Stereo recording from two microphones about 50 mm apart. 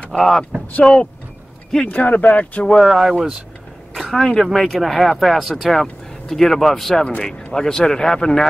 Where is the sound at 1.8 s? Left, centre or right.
Left.